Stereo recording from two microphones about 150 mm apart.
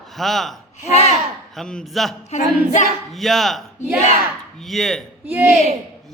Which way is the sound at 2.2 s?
55° left (ahead or behind).